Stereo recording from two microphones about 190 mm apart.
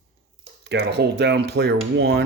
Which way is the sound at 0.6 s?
60° right (ahead or behind).